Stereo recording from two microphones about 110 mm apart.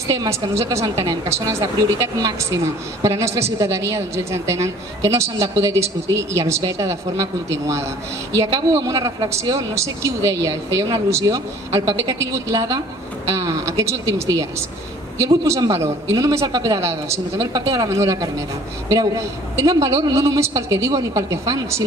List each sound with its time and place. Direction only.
0.1 s a woman's voice: 30° right (ahead or behind)